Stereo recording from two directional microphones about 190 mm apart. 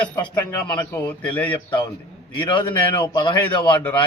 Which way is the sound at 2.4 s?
25° left (ahead or behind).